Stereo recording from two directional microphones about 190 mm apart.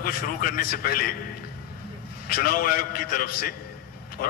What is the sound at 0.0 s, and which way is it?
A man's voice, 50° left (ahead or behind).